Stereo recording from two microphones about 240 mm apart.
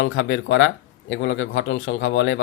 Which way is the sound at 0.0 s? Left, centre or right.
Left.